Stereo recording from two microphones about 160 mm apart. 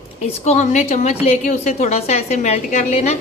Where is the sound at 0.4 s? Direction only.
50° left (ahead or behind).